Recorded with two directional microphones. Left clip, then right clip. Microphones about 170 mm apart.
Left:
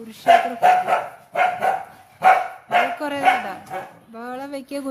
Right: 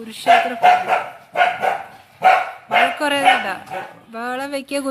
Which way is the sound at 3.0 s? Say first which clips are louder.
Right 4 dB; 5° right (ahead or behind).